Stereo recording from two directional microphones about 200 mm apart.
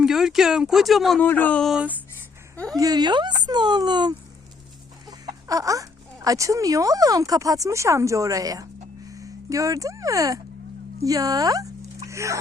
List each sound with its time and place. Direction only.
0.0 s speech: centre (ahead or behind)
2.7 s speech: 20° right (ahead or behind)